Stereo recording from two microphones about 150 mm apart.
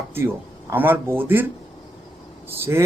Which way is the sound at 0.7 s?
15° right (ahead or behind).